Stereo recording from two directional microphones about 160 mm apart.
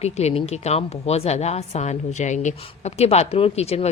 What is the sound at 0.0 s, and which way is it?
A woman's voice, 40° left (ahead or behind).